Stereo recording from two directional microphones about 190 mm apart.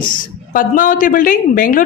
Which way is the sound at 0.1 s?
45° left (ahead or behind).